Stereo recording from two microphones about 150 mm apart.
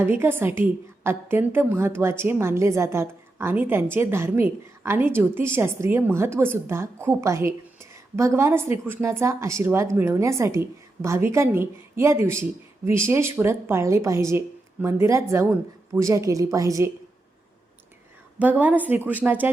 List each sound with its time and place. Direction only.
0.0 s a woman's voice: 15° right (ahead or behind)
18.3 s a woman's voice: 10° right (ahead or behind)